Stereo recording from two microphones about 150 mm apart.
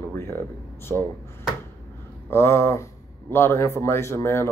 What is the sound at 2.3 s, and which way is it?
Speech, 15° left (ahead or behind).